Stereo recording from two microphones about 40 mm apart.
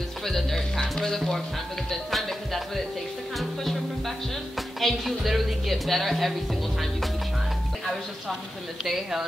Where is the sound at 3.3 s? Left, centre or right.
Centre.